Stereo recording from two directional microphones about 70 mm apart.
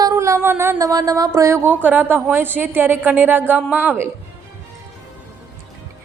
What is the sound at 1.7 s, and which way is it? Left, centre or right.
A woman's voice, right.